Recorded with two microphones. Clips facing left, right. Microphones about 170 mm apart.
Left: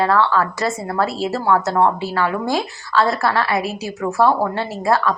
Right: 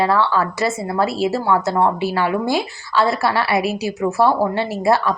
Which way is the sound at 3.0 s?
10° right (ahead or behind).